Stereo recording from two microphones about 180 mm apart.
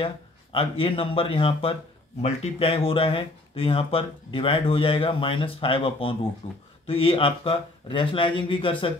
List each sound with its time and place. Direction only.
0.0 s speech: 30° left (ahead or behind)